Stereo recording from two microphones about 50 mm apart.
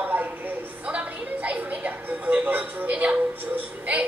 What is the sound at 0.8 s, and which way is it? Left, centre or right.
Music, right.